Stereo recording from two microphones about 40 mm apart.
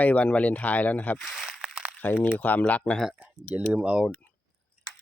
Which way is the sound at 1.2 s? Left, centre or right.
Centre.